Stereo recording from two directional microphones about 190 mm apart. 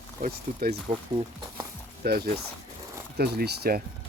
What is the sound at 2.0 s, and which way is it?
Speech, 50° right (ahead or behind).